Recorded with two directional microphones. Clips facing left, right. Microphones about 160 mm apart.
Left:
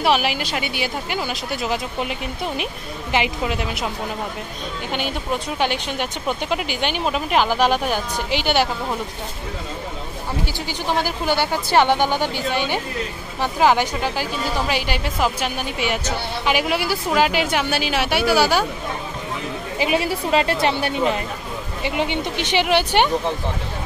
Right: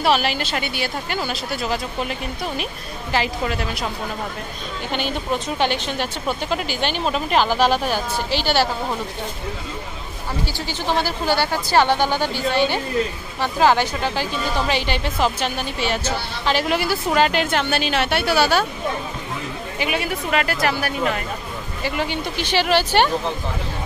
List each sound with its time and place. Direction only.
0.0 s a woman's voice: 15° left (ahead or behind)
5.6 s a woman's voice: 10° left (ahead or behind)
10.7 s a woman's voice: 15° left (ahead or behind)
19.8 s speech: 30° left (ahead or behind); by 23.0 s 15° left (ahead or behind)